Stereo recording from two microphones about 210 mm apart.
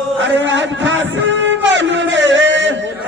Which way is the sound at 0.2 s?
60° right (ahead or behind).